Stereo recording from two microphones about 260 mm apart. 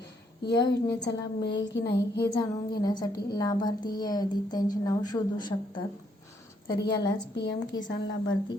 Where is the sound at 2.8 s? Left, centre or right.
Centre.